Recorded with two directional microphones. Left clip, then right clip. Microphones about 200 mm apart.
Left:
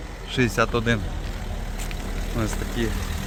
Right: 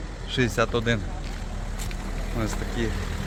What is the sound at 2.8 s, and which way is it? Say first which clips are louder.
Speech: left 2 dB; 60° left (ahead or behind).